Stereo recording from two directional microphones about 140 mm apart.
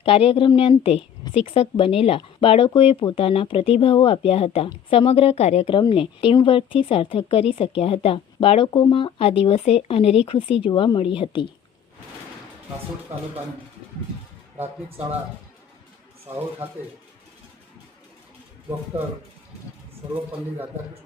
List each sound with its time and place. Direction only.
0.0 s speech: 40° left (ahead or behind)
5.7 s speech: 35° left (ahead or behind)